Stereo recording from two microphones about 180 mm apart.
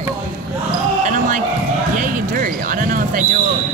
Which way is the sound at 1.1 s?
45° right (ahead or behind).